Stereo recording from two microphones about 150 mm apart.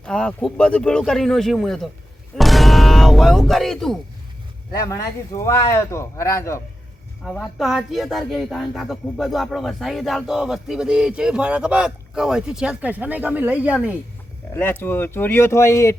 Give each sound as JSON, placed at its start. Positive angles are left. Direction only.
{"t": 0.0, "sound": "speech", "side_deg": 5}
{"t": 4.7, "sound": "speech", "side_deg": 20}
{"t": 7.3, "sound": "speech", "side_deg": 0}
{"t": 14.5, "sound": "speech", "side_deg": 15}